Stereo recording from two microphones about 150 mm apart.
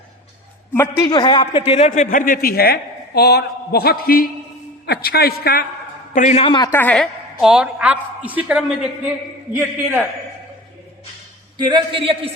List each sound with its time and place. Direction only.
0.7 s a man's voice: 15° left (ahead or behind)
1.0 s a man's voice: 30° left (ahead or behind)
1.9 s a man's voice: 65° left (ahead or behind); by 4.3 s 80° left
4.9 s a woman's voice: 90° left
6.1 s a man's voice: 50° left (ahead or behind)
6.7 s a woman's voice: 10° left (ahead or behind)
7.4 s a woman's voice: 5° right (ahead or behind)
11.5 s a man's voice: 30° right (ahead or behind)